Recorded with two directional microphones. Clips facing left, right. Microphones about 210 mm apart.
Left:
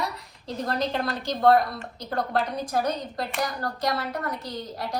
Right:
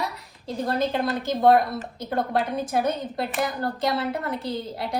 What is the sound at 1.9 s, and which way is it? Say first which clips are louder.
A woman's voice: right 1 dB; 25° right (ahead or behind).